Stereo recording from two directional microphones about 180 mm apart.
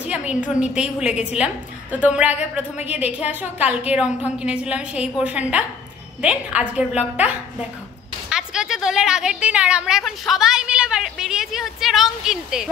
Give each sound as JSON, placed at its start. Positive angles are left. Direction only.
{"t": 0.0, "sound": "a sound", "side_deg": -5}
{"t": 0.6, "sound": "a woman's voice", "side_deg": -5}
{"t": 8.3, "sound": "a woman's voice", "side_deg": -5}